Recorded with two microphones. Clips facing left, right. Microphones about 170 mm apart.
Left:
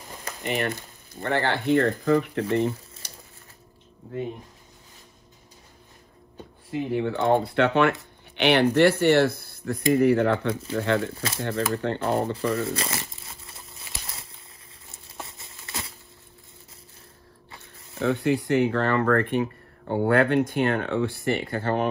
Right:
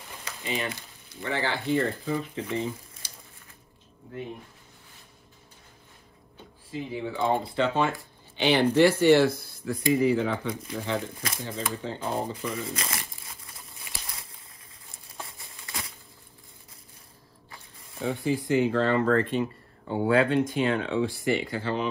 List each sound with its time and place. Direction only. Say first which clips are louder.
0.2 s a sound: left 4 dB; 60° left (ahead or behind)
1.2 s speech: left 5 dB; 60° left (ahead or behind)
6.7 s speech: left 7 dB; 65° left (ahead or behind); by 12.6 s 85° left
12.7 s crumpling: left 4 dB; 25° left (ahead or behind)
15.2 s patter: left 1 dB; 25° left (ahead or behind)
17.9 s speech: left 4 dB; 70° left (ahead or behind); by 21.8 s 55° left (ahead or behind)